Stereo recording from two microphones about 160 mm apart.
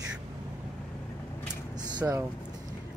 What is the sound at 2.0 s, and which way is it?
Speech, 15° right (ahead or behind).